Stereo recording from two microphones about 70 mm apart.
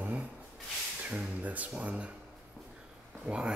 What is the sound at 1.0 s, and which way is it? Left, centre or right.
Speech, centre.